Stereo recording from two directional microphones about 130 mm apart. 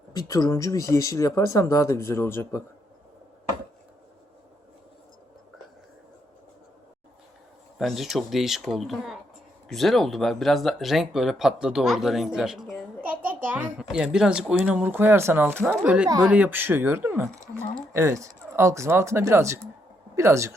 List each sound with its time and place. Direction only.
0.1 s speech: 30° left (ahead or behind)
7.8 s a child's voice: centre (ahead or behind); by 20.6 s 20° right (ahead or behind)